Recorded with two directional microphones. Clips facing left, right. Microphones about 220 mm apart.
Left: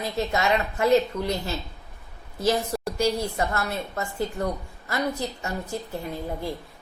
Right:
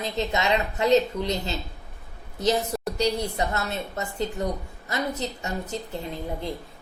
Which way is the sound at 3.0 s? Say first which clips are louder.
Left 1 dB; 20° right (ahead or behind).